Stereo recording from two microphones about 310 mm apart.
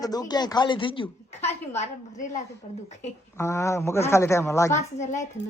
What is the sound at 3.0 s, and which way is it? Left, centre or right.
A man's voice, centre.